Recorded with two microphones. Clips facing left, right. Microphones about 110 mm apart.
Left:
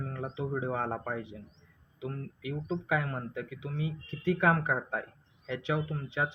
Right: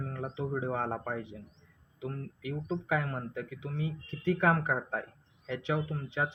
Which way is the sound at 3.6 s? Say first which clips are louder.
Left 1 dB; 35° right (ahead or behind).